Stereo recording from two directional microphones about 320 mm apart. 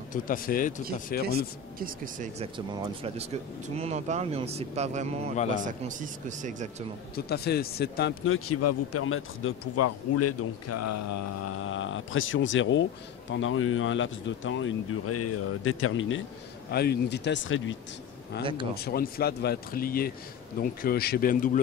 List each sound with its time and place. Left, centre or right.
0.1 s speech: left
1.2 s speech: right
7.2 s speech: left
8.5 s speech: left
11.5 s speech: left
18.4 s speech: centre
18.8 s speech: left